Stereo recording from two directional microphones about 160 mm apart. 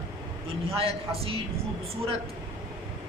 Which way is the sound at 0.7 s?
35° right (ahead or behind).